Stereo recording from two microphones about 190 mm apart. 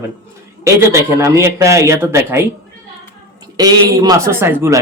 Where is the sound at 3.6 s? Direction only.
20° right (ahead or behind).